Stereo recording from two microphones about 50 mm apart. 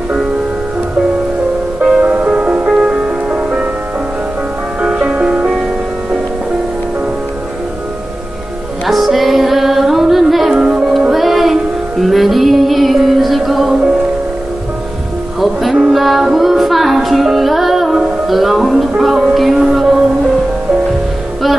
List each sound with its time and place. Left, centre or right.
2.0 s music: right
4.8 s music: centre
8.8 s music: centre
10.5 s music: centre
10.9 s music: centre
15.4 s music: centre